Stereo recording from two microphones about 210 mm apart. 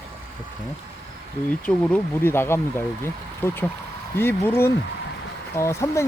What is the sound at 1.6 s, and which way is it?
Speech, 10° left (ahead or behind).